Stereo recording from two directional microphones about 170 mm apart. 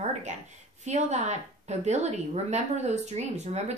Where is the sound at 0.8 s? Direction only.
40° right (ahead or behind).